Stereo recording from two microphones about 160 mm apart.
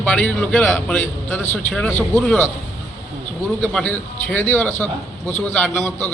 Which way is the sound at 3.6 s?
5° left (ahead or behind).